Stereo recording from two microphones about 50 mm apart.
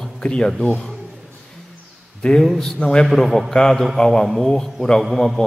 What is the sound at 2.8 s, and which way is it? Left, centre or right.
Speech, left.